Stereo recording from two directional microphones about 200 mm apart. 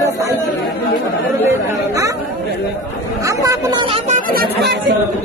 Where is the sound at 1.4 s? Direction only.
15° right (ahead or behind).